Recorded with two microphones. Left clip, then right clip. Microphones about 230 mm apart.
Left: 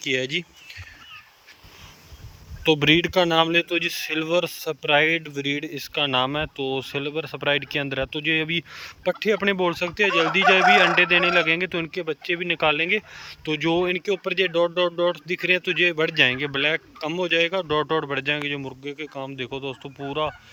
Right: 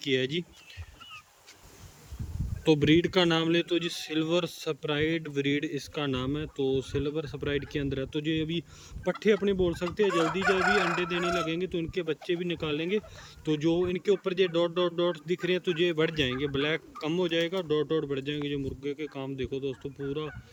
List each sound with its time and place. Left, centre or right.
0.0 s speech: centre
2.6 s speech: centre
10.4 s speech: left
11.4 s speech: centre